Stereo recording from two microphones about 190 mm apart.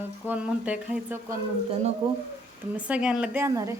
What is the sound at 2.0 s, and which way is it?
Speech, 25° right (ahead or behind).